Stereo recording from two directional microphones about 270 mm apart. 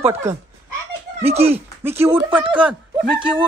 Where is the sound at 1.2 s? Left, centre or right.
Right.